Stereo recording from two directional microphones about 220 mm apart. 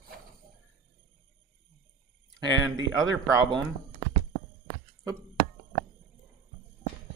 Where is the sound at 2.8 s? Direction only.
15° right (ahead or behind).